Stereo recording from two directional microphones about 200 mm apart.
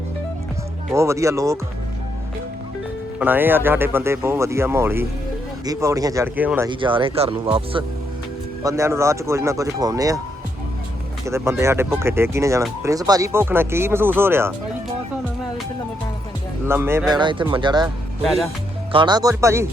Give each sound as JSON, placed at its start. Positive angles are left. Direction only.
{"t": 0.9, "sound": "speech", "side_deg": -15}
{"t": 3.2, "sound": "speech", "side_deg": -10}
{"t": 6.7, "sound": "speech", "side_deg": -25}
{"t": 8.6, "sound": "speech", "side_deg": -15}
{"t": 11.3, "sound": "speech", "side_deg": -15}
{"t": 16.6, "sound": "speech", "side_deg": -10}
{"t": 17.2, "sound": "speech", "side_deg": -25}
{"t": 17.8, "sound": "speech", "side_deg": 0}
{"t": 18.9, "sound": "speech", "side_deg": -25}